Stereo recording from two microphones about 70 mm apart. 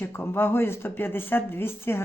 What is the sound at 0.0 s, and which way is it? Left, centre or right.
A man's voice, left.